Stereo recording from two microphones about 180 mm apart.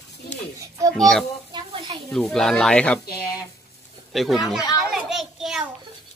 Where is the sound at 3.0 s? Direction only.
60° left (ahead or behind).